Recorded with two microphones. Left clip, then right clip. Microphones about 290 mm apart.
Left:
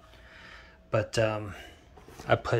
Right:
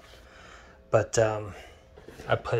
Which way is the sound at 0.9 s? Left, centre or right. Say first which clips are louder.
Right 4 dB; centre.